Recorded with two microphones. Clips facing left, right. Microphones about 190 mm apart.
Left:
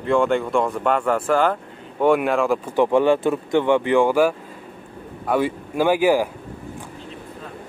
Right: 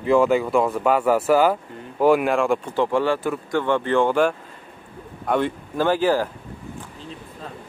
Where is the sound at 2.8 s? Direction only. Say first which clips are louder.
Left 6 dB; 20° left (ahead or behind).